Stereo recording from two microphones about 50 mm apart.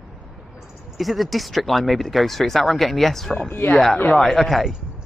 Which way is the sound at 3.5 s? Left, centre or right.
Left.